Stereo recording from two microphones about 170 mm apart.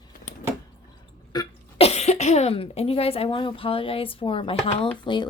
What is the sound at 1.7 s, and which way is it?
Speech, 35° left (ahead or behind).